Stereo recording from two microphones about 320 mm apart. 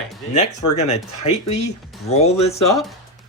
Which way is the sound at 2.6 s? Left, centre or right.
Centre.